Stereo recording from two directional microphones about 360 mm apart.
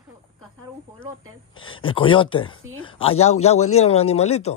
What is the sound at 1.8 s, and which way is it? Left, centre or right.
Speech, centre.